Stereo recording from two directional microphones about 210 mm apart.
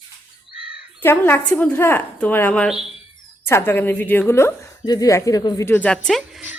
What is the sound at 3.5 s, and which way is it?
A woman's voice, 10° left (ahead or behind).